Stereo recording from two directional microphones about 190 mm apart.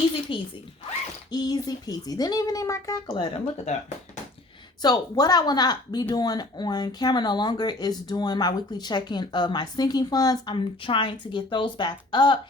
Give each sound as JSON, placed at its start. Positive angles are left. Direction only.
{"t": 0.3, "sound": "speech", "side_deg": 25}
{"t": 4.8, "sound": "speech", "side_deg": 20}